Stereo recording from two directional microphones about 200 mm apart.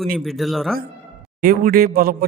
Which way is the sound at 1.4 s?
45° right (ahead or behind).